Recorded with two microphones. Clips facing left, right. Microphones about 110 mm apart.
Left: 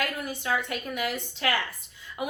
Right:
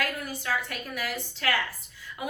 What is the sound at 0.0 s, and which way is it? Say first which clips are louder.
A woman's voice: left 1 dB; 20° left (ahead or behind).